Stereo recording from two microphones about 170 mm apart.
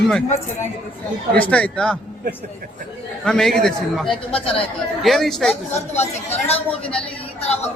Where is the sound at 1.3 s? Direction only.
10° left (ahead or behind).